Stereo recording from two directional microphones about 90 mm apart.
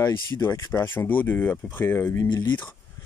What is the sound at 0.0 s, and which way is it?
Speech, 25° left (ahead or behind).